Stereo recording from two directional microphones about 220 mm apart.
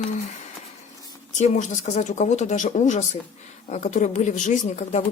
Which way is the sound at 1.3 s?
30° left (ahead or behind).